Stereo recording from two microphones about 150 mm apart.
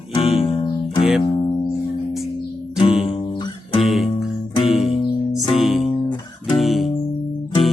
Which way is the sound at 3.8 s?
Centre (ahead or behind).